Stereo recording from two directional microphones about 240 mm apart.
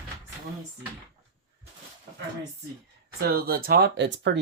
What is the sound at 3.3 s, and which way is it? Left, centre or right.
Speech, right.